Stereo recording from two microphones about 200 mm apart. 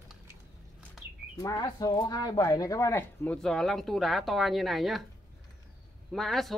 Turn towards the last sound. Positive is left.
turn(degrees=0)  # may be behind; listen again after turning